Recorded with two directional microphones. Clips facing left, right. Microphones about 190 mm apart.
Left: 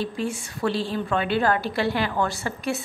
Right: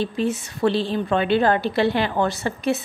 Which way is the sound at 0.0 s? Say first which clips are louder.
Right 5 dB; 20° right (ahead or behind).